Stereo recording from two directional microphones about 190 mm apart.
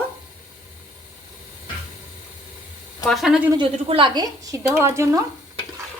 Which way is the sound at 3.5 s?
25° right (ahead or behind).